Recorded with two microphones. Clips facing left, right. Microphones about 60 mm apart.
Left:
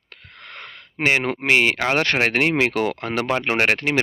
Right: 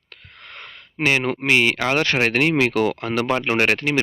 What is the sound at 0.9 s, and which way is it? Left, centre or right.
Speech, left.